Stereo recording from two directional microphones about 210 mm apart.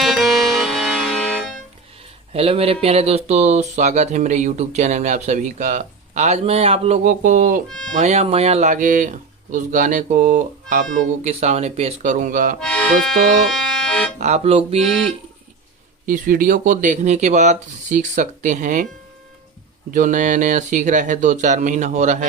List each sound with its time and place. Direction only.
0.0 s music: centre (ahead or behind)
2.3 s speech: 30° right (ahead or behind)
7.7 s speech: centre (ahead or behind)
7.9 s speech: 30° right (ahead or behind)
12.5 s speech: 5° left (ahead or behind)
13.5 s accordion: 5° left (ahead or behind)
14.2 s speech: 30° right (ahead or behind)
16.0 s speech: 40° right (ahead or behind)
19.9 s speech: 35° right (ahead or behind)